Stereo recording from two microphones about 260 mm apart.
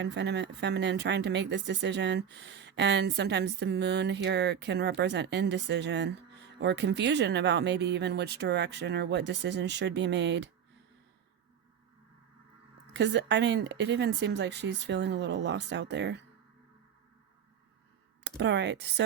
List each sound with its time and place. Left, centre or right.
0.0 s speech: right
12.9 s speech: right
18.2 s speech: right